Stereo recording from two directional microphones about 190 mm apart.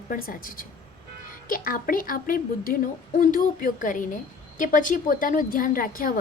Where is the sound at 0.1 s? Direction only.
50° left (ahead or behind).